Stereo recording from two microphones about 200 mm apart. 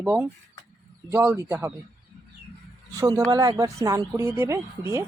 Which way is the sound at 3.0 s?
20° right (ahead or behind).